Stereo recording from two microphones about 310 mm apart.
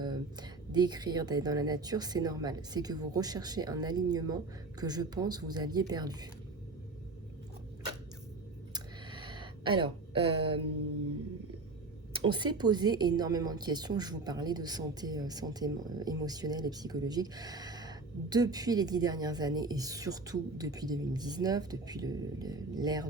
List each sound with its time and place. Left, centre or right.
0.0 s a woman's voice: centre
8.7 s a sound: centre
12.2 s a woman's voice: centre